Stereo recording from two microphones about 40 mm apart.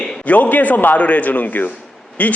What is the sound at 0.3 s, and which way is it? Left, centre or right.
A man's voice, left.